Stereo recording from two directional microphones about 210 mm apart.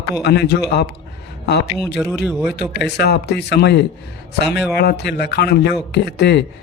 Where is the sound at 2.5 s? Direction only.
50° left (ahead or behind).